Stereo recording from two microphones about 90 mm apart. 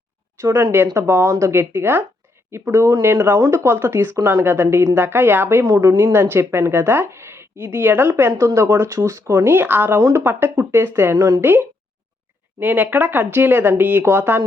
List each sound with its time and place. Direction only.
0.9 s a woman's voice: 30° right (ahead or behind)
11.2 s a woman's voice: 35° right (ahead or behind)
12.5 s a woman's voice: 20° right (ahead or behind)